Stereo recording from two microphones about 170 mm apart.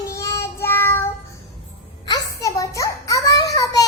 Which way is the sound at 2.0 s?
20° left (ahead or behind).